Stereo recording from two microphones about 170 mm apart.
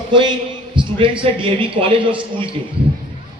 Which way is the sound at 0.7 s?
30° right (ahead or behind).